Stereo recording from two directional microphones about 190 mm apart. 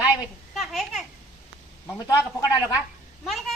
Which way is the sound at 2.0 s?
15° left (ahead or behind).